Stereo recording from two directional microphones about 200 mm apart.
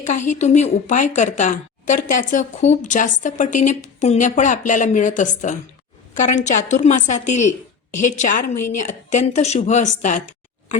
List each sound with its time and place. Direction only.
0.1 s a woman's voice: 35° left (ahead or behind)